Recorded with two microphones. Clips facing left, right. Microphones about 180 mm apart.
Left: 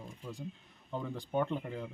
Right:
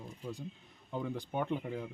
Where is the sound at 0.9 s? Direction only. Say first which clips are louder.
Left 2 dB; 5° right (ahead or behind).